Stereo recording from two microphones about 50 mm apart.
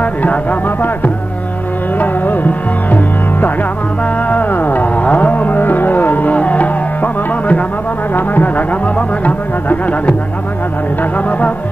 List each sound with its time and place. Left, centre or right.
0.0 s music: left